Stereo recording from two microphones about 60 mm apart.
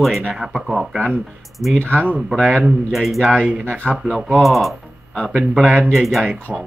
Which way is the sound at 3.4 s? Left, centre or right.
Right.